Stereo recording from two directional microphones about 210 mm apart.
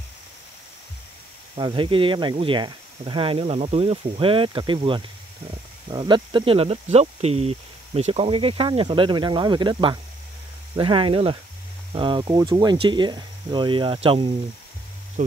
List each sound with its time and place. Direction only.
1.6 s speech: 25° right (ahead or behind)